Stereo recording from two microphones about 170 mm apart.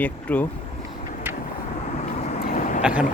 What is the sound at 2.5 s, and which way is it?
Vehicle, 50° left (ahead or behind).